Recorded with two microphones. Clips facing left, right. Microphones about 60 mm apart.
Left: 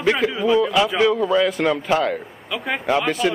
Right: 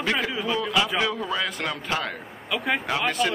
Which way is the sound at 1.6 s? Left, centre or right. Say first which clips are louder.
Left 9 dB; left.